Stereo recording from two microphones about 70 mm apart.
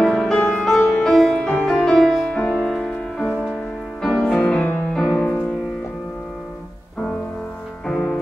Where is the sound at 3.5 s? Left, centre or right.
Centre.